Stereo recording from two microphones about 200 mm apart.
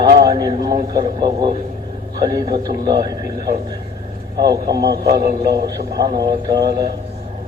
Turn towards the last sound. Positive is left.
turn(degrees=-20)  # may be behind; listen again after turning